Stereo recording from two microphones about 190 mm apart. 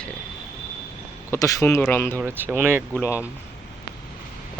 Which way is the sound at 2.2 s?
10° right (ahead or behind).